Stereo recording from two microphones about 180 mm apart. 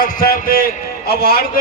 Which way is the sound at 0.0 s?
55° left (ahead or behind).